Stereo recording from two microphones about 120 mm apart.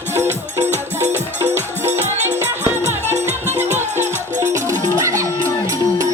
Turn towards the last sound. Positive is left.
turn(degrees=-25)  # may be behind; listen again after turning